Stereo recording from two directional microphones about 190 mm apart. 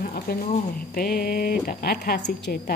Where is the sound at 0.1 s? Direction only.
55° left (ahead or behind).